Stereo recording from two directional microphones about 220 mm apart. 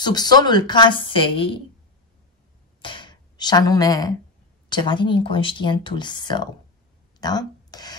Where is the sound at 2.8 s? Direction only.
20° left (ahead or behind).